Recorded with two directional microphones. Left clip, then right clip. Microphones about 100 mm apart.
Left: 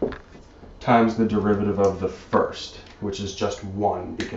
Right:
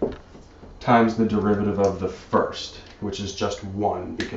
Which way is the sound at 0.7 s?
5° right (ahead or behind).